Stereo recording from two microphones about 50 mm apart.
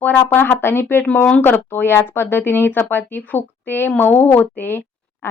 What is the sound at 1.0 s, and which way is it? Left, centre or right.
Speech, left.